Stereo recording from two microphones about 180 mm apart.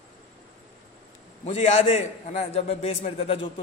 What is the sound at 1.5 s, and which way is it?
A man's voice, 35° left (ahead or behind).